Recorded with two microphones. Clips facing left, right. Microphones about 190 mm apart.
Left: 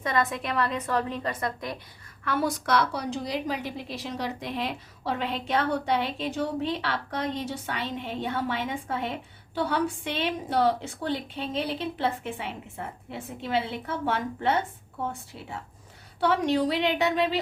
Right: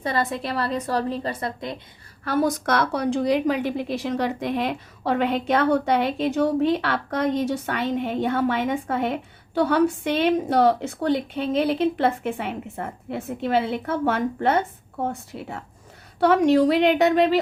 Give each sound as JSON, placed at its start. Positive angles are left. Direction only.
{"t": 0.0, "sound": "a woman's voice", "side_deg": -30}
{"t": 2.2, "sound": "a woman's voice", "side_deg": -40}